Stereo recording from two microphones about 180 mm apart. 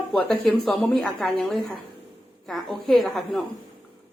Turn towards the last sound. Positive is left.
turn(degrees=0)  # may be behind; listen again after turning